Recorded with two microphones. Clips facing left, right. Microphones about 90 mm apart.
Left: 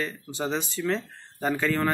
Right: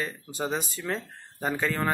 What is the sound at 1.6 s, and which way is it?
Speech, 20° right (ahead or behind).